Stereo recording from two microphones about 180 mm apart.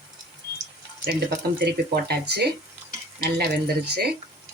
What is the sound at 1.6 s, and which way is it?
Speech, 65° right (ahead or behind).